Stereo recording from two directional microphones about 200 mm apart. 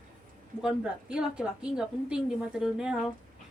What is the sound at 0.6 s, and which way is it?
A woman's voice, 5° right (ahead or behind).